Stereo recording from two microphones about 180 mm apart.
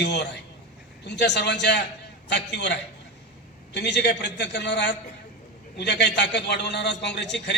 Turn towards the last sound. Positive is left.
turn(degrees=70)  # may be behind; listen again after turning